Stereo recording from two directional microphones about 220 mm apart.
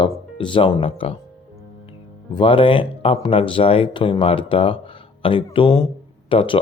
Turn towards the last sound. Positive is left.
turn(degrees=25)  # may be behind; listen again after turning